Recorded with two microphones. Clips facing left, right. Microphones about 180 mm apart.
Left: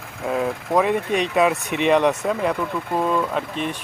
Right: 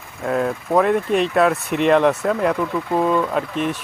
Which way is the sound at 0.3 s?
Centre (ahead or behind).